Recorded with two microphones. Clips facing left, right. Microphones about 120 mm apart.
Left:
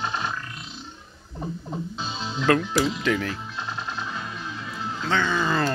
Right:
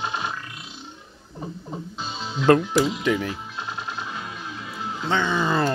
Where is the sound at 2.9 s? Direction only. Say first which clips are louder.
Right 1 dB; 15° right (ahead or behind).